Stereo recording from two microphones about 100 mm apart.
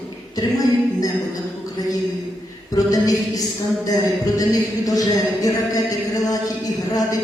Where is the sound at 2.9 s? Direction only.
35° left (ahead or behind).